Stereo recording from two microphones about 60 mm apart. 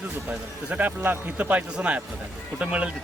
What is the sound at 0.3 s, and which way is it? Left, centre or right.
A man's voice, right.